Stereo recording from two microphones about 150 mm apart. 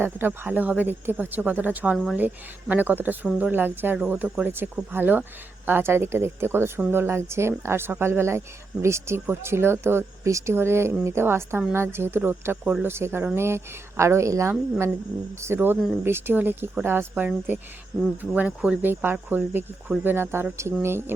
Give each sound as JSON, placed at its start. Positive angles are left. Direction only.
{"t": 0.0, "sound": "speech", "side_deg": -15}